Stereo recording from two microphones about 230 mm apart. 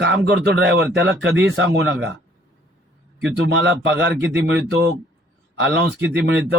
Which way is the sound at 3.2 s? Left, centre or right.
Right.